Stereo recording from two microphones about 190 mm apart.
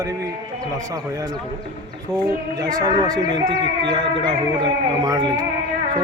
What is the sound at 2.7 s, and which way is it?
Speech, 20° right (ahead or behind).